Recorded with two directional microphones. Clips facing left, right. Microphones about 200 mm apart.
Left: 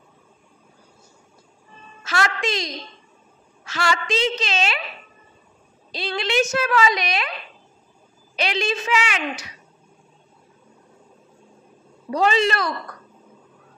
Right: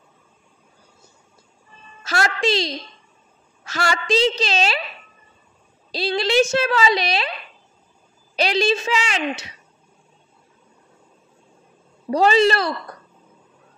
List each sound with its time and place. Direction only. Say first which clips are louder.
2.0 s a woman's voice: right 3 dB; 35° right (ahead or behind)
5.9 s a woman's voice: right 5 dB; 35° right (ahead or behind)
8.4 s a woman's voice: right 5 dB; 35° right (ahead or behind)
12.1 s a woman's voice: right 4 dB; 35° right (ahead or behind)